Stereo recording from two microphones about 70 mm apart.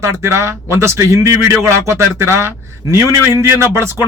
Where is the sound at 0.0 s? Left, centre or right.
Right.